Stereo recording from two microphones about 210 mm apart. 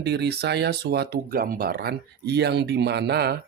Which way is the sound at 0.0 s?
50° right (ahead or behind).